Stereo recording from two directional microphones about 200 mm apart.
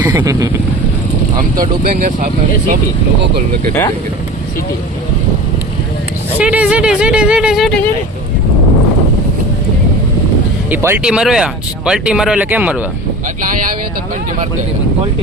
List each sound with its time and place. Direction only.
0.0 s speech: 15° right (ahead or behind)
1.6 s speech: 35° right (ahead or behind)
6.4 s speech: 5° right (ahead or behind)
10.7 s speech: 10° right (ahead or behind)